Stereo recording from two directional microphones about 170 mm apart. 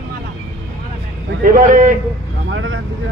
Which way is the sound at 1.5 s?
50° right (ahead or behind).